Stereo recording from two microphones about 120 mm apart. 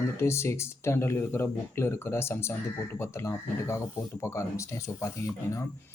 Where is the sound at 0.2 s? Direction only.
20° left (ahead or behind).